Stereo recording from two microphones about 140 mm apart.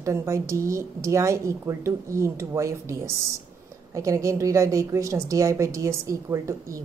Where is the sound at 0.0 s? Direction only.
20° right (ahead or behind).